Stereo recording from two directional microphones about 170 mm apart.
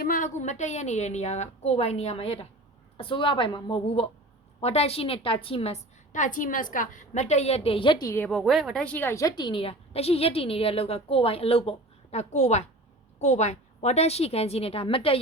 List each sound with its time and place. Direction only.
0.0 s a woman's voice: 50° left (ahead or behind); by 8.3 s 15° left (ahead or behind)
8.3 s a woman's voice: centre (ahead or behind); by 15.2 s 35° left (ahead or behind)